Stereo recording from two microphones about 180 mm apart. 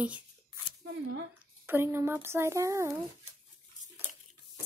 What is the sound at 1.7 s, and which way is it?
Speech, 15° right (ahead or behind).